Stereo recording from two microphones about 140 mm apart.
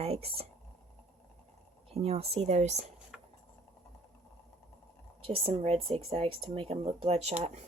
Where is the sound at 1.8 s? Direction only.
45° right (ahead or behind).